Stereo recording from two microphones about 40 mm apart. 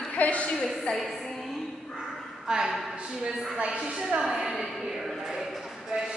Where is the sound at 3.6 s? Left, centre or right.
Right.